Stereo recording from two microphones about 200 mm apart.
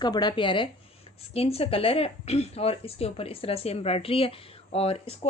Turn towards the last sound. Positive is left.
turn(degrees=30)  # may be behind; listen again after turning